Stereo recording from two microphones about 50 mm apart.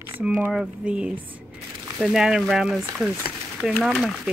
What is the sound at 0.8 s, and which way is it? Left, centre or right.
Speech, right.